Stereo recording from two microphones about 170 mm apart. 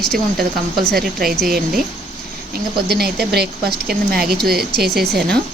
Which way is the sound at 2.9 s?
70° right (ahead or behind).